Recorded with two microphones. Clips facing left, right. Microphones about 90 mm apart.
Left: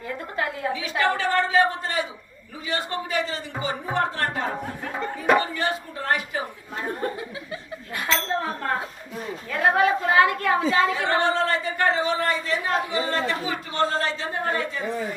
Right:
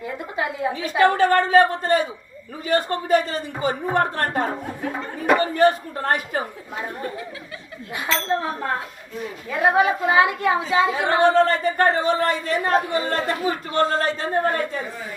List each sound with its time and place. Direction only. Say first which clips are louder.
0.3 s a sound: right 3 dB; 10° right (ahead or behind)
0.7 s speech: right 7 dB; 45° right (ahead or behind)
5.5 s speech: right 9 dB; 45° right (ahead or behind)
7.9 s a woman's voice: right 2 dB; 10° right (ahead or behind)
11.3 s speech: right 6 dB; 45° right (ahead or behind)